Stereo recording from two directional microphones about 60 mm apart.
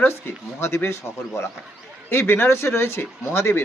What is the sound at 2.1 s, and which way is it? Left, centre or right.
Speech, left.